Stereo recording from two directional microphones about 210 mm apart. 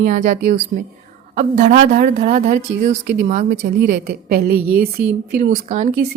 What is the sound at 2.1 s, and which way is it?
A woman's voice, 35° right (ahead or behind).